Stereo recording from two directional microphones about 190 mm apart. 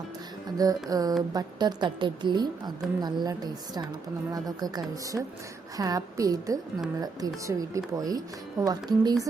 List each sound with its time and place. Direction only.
0.5 s a woman's voice: 20° right (ahead or behind)